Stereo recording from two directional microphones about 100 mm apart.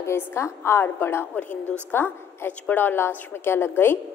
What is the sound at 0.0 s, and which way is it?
A woman's voice, 25° left (ahead or behind).